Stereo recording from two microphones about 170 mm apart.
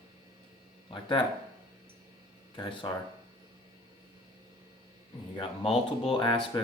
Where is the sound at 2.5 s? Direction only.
25° left (ahead or behind).